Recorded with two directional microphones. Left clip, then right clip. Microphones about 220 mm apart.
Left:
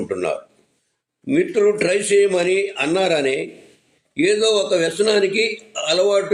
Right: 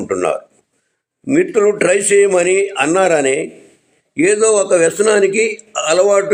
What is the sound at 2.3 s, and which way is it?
A man's voice, 15° right (ahead or behind).